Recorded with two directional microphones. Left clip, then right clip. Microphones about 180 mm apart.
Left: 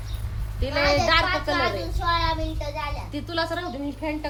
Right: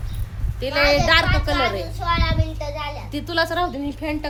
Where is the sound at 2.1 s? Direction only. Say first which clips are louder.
Right 1 dB; 40° right (ahead or behind).